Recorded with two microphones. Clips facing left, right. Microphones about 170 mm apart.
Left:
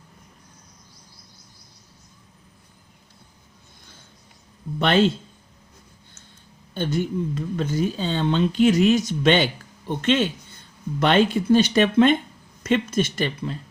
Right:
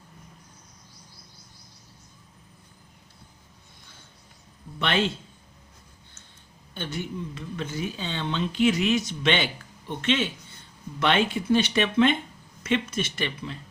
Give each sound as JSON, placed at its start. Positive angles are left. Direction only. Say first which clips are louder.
{"t": 4.8, "sound": "speech", "louder": "left 7 dB", "side_deg": 40}
{"t": 6.7, "sound": "speech", "louder": "left 8 dB", "side_deg": 40}